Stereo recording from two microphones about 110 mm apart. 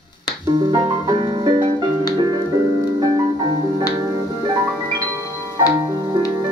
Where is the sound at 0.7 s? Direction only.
40° right (ahead or behind).